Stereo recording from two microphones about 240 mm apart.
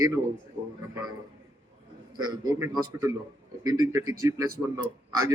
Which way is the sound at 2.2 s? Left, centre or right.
Centre.